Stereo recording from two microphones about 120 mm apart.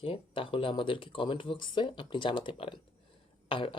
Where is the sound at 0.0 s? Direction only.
50° left (ahead or behind).